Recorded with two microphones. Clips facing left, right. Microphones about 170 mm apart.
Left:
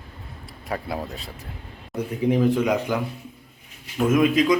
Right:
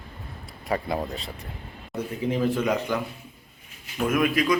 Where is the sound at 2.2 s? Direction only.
15° left (ahead or behind).